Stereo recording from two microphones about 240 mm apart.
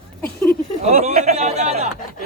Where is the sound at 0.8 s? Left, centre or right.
Right.